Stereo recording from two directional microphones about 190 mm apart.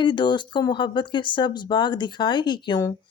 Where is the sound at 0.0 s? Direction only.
25° left (ahead or behind).